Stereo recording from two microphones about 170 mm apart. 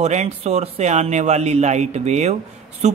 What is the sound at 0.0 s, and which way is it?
Speech, 40° right (ahead or behind).